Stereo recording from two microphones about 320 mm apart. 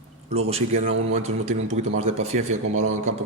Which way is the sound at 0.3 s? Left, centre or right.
Centre.